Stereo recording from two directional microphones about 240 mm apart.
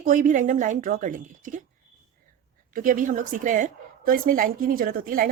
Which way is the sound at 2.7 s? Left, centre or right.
Right.